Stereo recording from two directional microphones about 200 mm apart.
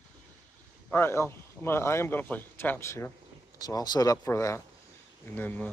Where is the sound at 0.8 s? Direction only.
10° left (ahead or behind).